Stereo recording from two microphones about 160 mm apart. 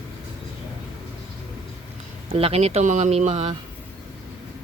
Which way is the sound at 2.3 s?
40° right (ahead or behind).